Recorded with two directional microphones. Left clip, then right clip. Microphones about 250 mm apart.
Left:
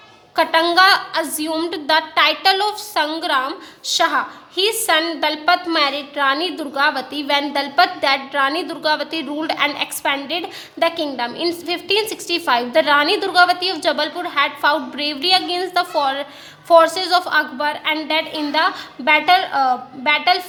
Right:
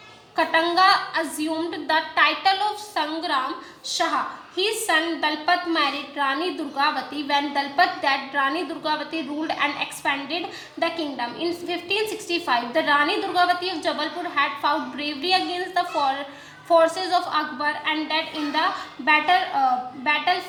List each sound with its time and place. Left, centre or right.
0.3 s a woman's voice: left